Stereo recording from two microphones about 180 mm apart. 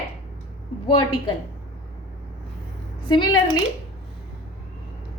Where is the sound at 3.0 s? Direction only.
25° left (ahead or behind).